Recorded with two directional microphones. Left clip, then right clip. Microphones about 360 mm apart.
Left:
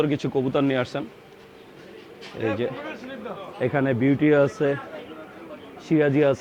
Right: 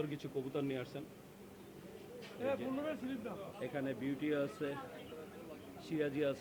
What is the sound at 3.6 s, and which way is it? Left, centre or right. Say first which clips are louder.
A man's voice: left 19 dB; left.